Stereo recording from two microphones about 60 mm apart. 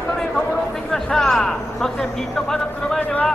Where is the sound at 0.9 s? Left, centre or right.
Centre.